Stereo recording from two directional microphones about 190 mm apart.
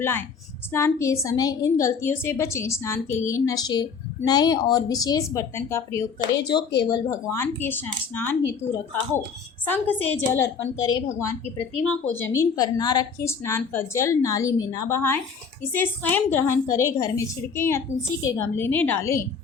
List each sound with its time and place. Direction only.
0.0 s a woman's voice: 10° left (ahead or behind)
9.6 s a woman's voice: 10° left (ahead or behind)